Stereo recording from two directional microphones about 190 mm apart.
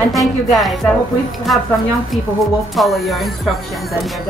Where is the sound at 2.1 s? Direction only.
Centre (ahead or behind).